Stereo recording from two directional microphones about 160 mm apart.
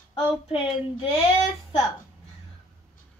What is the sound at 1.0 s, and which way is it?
Child singing, 35° left (ahead or behind).